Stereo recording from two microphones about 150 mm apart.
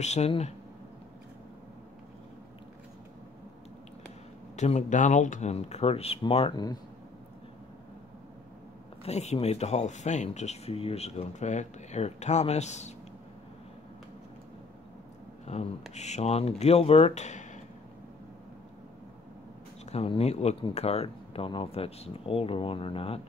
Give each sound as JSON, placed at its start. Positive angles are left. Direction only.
{"t": 0.0, "sound": "speech", "side_deg": 50}
{"t": 4.6, "sound": "speech", "side_deg": 50}
{"t": 9.0, "sound": "speech", "side_deg": 45}
{"t": 15.4, "sound": "speech", "side_deg": 45}
{"t": 19.9, "sound": "speech", "side_deg": 40}